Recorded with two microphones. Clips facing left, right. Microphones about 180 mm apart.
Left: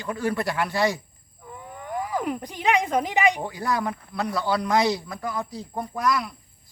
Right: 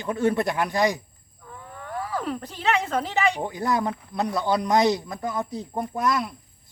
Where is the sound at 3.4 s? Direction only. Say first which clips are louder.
Right 2 dB; 20° right (ahead or behind).